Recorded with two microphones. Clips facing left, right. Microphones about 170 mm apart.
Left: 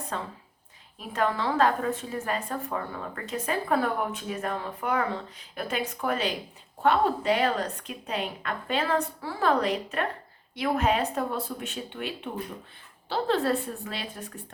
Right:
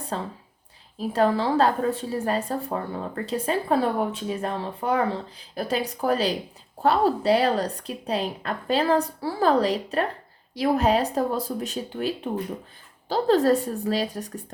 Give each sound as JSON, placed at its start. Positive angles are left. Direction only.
{"t": 0.1, "sound": "a woman's voice", "side_deg": -30}